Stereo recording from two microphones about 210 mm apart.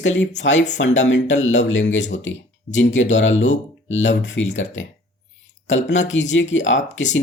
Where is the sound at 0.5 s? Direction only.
35° left (ahead or behind).